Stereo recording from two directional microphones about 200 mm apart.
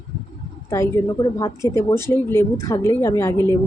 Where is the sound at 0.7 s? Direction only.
15° left (ahead or behind).